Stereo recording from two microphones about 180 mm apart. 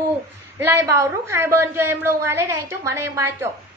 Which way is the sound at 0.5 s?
15° right (ahead or behind).